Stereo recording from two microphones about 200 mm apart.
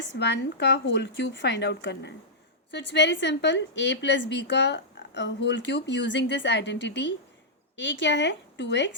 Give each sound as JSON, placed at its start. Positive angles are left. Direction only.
{"t": 0.1, "sound": "a woman's voice", "side_deg": 60}